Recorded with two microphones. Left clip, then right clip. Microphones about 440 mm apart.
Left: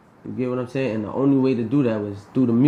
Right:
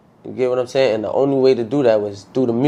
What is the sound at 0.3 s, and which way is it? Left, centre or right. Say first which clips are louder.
Speech: right 9 dB; right.